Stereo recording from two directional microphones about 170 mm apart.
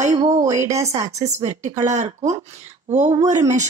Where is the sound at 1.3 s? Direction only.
45° right (ahead or behind).